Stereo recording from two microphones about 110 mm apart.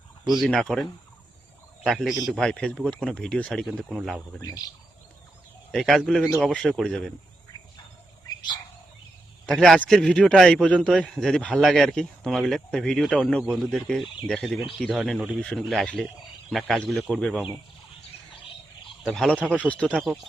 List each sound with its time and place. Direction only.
0.3 s a man's voice: centre (ahead or behind)
4.4 s cricket: 35° left (ahead or behind)
5.7 s a man's voice: 5° left (ahead or behind)
9.5 s a man's voice: 5° left (ahead or behind)
19.0 s a man's voice: 5° left (ahead or behind)